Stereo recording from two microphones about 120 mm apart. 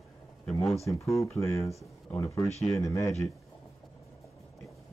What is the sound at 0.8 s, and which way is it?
Speech, 25° left (ahead or behind).